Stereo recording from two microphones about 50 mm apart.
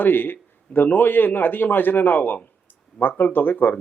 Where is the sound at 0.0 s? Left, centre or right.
Left.